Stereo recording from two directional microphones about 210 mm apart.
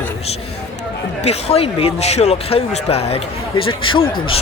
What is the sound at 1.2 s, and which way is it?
Speech, 30° left (ahead or behind).